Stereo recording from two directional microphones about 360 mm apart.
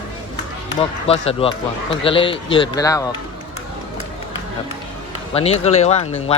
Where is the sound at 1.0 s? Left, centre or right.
Centre.